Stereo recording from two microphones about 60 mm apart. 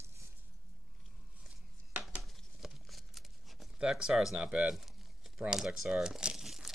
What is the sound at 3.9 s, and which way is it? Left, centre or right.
Speech, centre.